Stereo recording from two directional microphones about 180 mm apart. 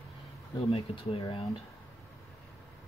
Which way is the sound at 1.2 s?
30° left (ahead or behind).